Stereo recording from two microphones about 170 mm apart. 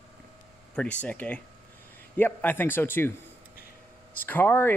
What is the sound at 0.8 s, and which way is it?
Speech, 5° left (ahead or behind).